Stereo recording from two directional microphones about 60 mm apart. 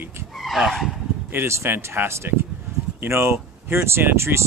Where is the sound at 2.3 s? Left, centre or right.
Right.